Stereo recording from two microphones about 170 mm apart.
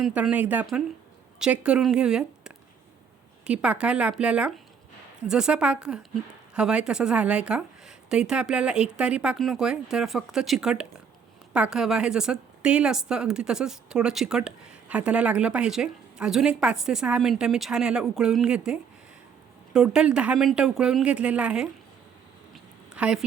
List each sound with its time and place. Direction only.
0.0 s speech: 5° right (ahead or behind)
23.0 s a woman's voice: 5° right (ahead or behind)